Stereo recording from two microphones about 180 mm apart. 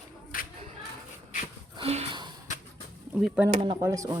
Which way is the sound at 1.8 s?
35° right (ahead or behind).